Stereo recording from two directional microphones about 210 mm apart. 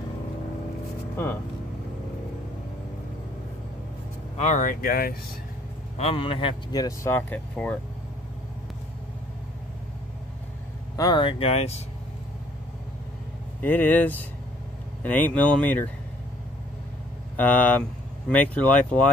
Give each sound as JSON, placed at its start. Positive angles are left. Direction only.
{"t": 4.4, "sound": "speech", "side_deg": 35}
{"t": 5.9, "sound": "speech", "side_deg": 25}
{"t": 11.0, "sound": "speech", "side_deg": 20}
{"t": 13.6, "sound": "speech", "side_deg": 10}
{"t": 17.4, "sound": "speech", "side_deg": 10}